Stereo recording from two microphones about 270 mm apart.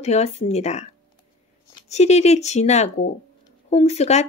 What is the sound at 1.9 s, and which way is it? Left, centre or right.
Speech, left.